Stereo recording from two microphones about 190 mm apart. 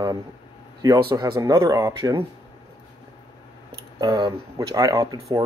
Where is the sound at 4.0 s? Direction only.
20° right (ahead or behind).